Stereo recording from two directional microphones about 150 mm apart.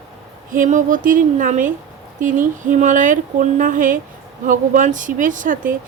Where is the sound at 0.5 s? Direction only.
60° right (ahead or behind).